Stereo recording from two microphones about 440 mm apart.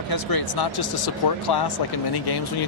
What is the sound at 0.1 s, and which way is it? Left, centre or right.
Speech, left.